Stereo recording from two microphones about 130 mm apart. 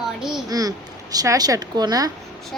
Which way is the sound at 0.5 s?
30° right (ahead or behind).